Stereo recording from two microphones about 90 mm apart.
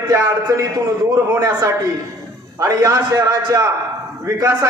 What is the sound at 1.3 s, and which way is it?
A man's voice, 40° right (ahead or behind).